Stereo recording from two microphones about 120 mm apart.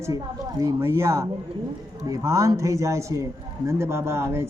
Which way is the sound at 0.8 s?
20° right (ahead or behind).